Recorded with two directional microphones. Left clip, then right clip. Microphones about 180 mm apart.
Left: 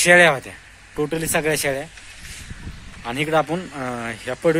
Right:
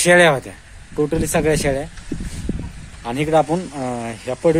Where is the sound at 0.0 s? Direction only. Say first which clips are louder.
Right 1 dB; 15° right (ahead or behind).